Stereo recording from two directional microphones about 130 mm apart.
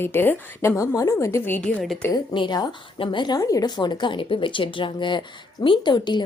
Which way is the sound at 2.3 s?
35° left (ahead or behind).